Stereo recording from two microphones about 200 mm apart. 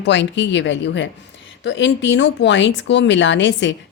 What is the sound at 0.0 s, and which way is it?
Speech, 65° left (ahead or behind).